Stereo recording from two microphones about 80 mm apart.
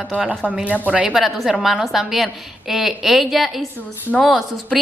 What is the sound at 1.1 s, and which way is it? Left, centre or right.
A woman's voice, centre.